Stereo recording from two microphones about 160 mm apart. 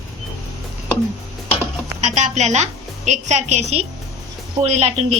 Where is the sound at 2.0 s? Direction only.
45° right (ahead or behind).